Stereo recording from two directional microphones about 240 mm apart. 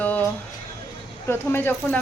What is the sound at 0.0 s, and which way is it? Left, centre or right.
Music, centre.